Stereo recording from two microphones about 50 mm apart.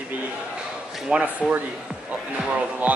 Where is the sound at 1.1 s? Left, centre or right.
Right.